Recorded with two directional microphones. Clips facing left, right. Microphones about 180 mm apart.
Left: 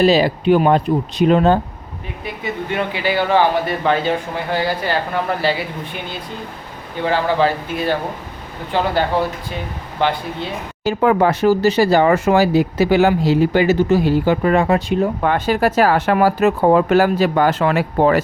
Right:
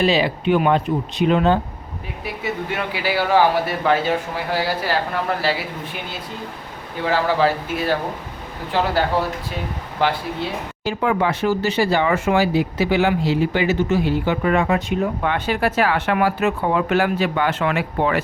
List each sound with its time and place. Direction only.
0.0 s speech: 40° left (ahead or behind)
2.2 s a man's voice: 5° right (ahead or behind)
10.8 s speech: 45° left (ahead or behind)